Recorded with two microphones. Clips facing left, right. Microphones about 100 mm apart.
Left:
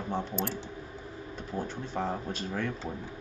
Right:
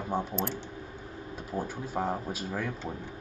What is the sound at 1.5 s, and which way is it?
Speech, 10° right (ahead or behind).